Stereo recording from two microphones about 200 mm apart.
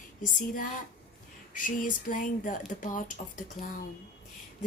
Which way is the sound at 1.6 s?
40° left (ahead or behind).